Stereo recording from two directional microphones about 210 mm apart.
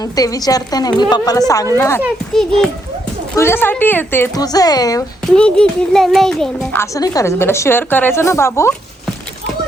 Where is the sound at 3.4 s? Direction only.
10° left (ahead or behind).